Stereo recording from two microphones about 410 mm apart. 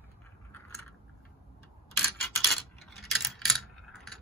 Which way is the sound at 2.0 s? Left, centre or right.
Centre.